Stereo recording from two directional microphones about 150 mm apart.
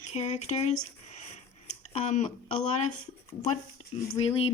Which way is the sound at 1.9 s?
50° left (ahead or behind).